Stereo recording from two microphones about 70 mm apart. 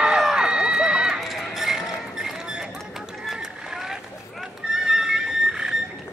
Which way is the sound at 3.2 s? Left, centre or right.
Centre.